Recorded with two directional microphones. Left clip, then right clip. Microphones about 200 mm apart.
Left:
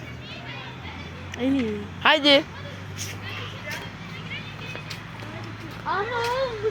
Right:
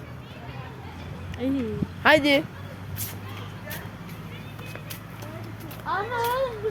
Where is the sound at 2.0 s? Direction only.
10° right (ahead or behind).